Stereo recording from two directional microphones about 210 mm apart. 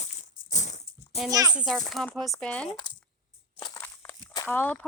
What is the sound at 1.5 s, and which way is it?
Speech, centre (ahead or behind).